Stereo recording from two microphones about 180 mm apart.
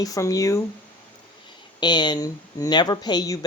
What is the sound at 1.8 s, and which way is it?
Speech, 25° left (ahead or behind).